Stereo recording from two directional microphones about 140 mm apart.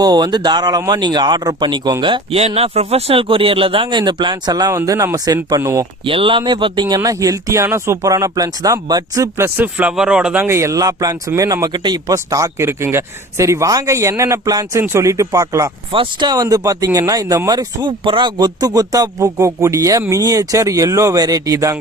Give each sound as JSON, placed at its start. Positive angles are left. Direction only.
{"t": 0.0, "sound": "speech", "side_deg": -30}
{"t": 2.6, "sound": "speech", "side_deg": -45}
{"t": 6.1, "sound": "speech", "side_deg": -40}
{"t": 10.4, "sound": "speech", "side_deg": -20}
{"t": 15.9, "sound": "speech", "side_deg": -35}